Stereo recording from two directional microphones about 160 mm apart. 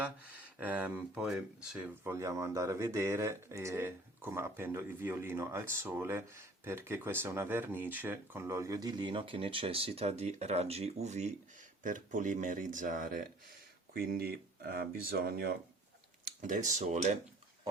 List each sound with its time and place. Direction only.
0.6 s speech: 10° right (ahead or behind)
2.0 s speech: 15° right (ahead or behind); by 13.2 s 55° right (ahead or behind)
13.9 s speech: 70° right (ahead or behind)
16.4 s speech: 50° right (ahead or behind)